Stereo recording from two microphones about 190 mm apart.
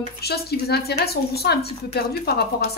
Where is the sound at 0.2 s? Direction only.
55° left (ahead or behind).